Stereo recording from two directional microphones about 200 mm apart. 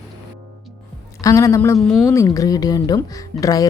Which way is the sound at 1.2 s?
15° left (ahead or behind).